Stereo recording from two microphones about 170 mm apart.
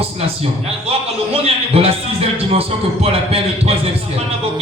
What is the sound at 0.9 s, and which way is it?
A man's voice, 35° right (ahead or behind).